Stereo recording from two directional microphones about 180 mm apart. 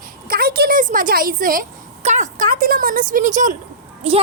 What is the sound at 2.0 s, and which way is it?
A woman's voice, 40° right (ahead or behind).